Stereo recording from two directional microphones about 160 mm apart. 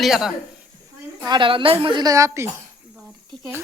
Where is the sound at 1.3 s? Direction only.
30° right (ahead or behind).